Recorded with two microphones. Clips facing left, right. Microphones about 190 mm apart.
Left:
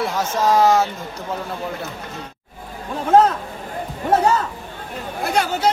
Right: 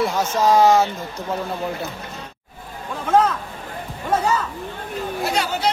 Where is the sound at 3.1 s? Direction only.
35° left (ahead or behind).